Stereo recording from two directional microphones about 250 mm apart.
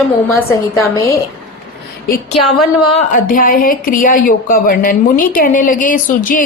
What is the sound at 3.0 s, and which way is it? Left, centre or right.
A woman's voice, left.